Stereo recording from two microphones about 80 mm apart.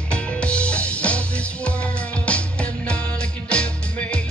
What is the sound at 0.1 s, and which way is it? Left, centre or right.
Music, centre.